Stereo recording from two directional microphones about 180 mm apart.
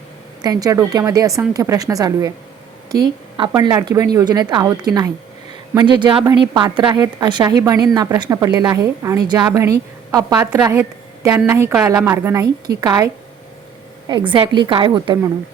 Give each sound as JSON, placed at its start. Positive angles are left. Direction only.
{"t": 0.4, "sound": "a woman's voice", "side_deg": -20}
{"t": 14.1, "sound": "a woman's voice", "side_deg": -25}